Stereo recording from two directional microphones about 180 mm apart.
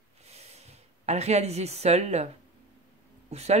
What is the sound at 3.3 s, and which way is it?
Speech, 35° right (ahead or behind).